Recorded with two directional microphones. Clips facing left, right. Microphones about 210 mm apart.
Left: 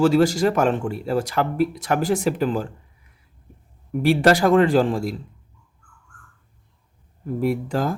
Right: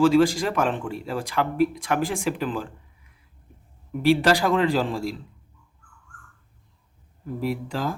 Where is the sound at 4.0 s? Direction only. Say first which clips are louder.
Left 3 dB; 45° left (ahead or behind).